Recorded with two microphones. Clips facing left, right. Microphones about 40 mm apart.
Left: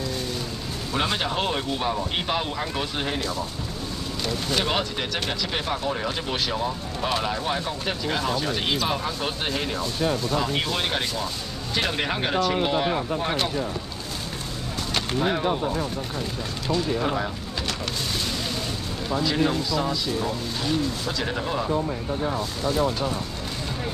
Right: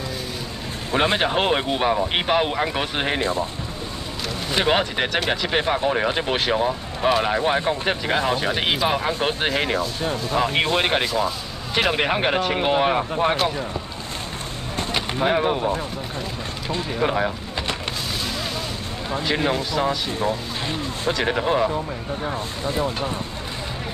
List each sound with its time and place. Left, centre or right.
0.9 s speech: right
4.5 s speech: right
7.2 s speech: right
15.1 s speech: right
19.0 s speech: right